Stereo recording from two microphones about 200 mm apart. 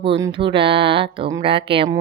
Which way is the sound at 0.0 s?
25° right (ahead or behind).